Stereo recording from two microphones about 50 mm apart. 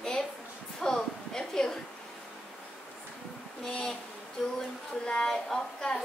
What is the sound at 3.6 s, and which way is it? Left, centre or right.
Speech, centre.